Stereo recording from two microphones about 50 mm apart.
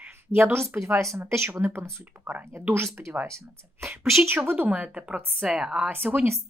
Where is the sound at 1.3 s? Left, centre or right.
Right.